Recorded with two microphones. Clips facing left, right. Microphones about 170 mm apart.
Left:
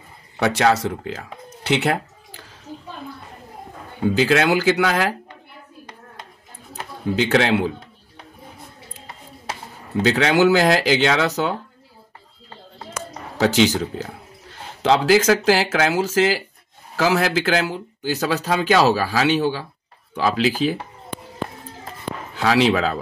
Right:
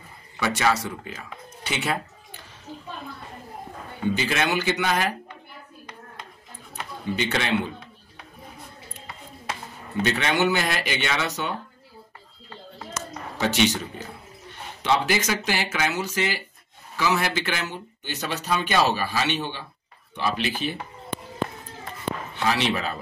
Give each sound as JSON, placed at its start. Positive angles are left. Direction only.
{"t": 0.4, "sound": "speech", "side_deg": 70}
{"t": 1.7, "sound": "a sound", "side_deg": 75}
{"t": 4.1, "sound": "speech", "side_deg": 85}
{"t": 7.2, "sound": "speech", "side_deg": 80}
{"t": 10.0, "sound": "speech", "side_deg": 90}
{"t": 13.4, "sound": "speech", "side_deg": 90}
{"t": 22.3, "sound": "speech", "side_deg": 90}